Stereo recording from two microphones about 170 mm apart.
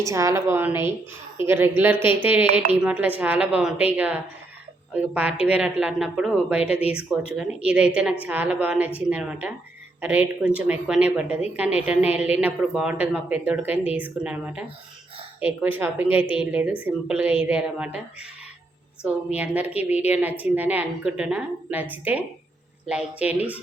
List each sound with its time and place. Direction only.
0.0 s a woman's voice: 20° right (ahead or behind)